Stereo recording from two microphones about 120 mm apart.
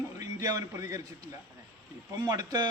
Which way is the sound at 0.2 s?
30° right (ahead or behind).